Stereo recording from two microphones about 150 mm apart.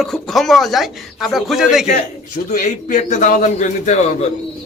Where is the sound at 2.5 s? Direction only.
60° left (ahead or behind).